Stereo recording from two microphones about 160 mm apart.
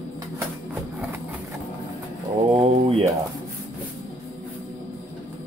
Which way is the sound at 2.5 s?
35° right (ahead or behind).